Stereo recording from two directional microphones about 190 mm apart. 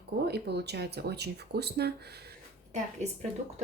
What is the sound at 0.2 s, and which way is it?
Speech, 60° right (ahead or behind).